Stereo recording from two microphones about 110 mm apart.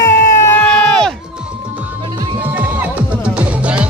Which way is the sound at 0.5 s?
10° left (ahead or behind).